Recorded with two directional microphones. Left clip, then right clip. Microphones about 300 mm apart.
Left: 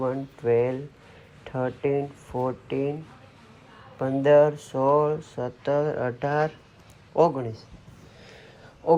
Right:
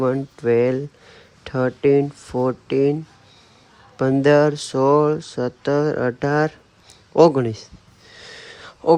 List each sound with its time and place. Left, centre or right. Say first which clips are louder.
0.0 s speech: right 6 dB; right
3.9 s a man's voice: right 3 dB; right
8.2 s a sound: right 11 dB; right